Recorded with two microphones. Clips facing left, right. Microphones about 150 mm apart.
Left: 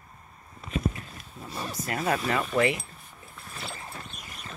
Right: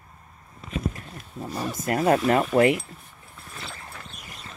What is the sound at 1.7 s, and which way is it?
Speech, 50° right (ahead or behind).